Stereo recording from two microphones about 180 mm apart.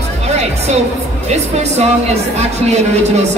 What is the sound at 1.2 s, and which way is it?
Speech, 35° right (ahead or behind).